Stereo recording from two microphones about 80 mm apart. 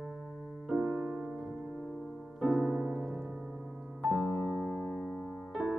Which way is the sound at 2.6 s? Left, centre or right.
Right.